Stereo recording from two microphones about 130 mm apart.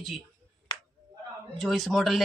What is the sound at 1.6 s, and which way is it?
Speech, centre (ahead or behind).